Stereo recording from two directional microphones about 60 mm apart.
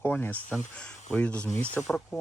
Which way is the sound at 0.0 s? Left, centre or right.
Left.